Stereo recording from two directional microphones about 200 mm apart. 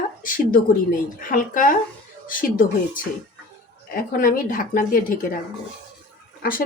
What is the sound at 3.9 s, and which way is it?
Speech, 45° left (ahead or behind).